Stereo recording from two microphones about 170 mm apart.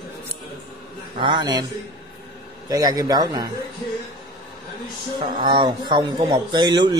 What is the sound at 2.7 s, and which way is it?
Speech, 25° right (ahead or behind).